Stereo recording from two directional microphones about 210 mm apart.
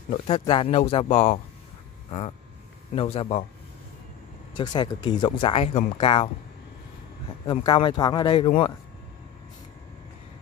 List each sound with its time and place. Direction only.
0.1 s speech: 25° left (ahead or behind)
4.6 s speech: 20° left (ahead or behind)
7.4 s speech: 25° left (ahead or behind)